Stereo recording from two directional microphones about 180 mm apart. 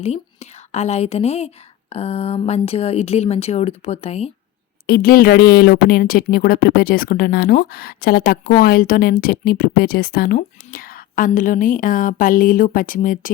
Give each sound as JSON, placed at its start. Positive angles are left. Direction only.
{"t": 0.0, "sound": "speech", "side_deg": 40}
{"t": 4.9, "sound": "speech", "side_deg": 55}